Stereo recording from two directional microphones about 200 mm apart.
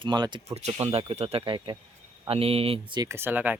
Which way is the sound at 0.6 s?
35° right (ahead or behind).